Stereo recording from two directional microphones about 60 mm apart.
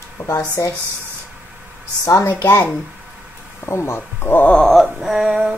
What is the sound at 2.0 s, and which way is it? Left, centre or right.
Speech, left.